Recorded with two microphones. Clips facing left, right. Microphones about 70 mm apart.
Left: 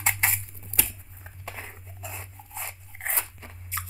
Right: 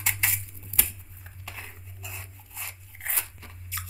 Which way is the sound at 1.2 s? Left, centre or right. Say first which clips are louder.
Left 3 dB; left.